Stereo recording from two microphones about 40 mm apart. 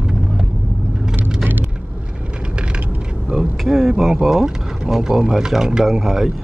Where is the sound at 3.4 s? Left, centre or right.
Centre.